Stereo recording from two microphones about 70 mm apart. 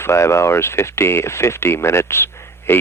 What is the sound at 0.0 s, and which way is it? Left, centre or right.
Speech, left.